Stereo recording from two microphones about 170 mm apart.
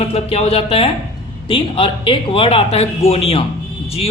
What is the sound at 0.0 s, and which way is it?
A man's voice, 35° left (ahead or behind).